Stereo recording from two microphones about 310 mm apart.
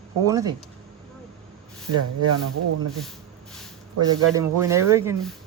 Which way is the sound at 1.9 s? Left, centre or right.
Right.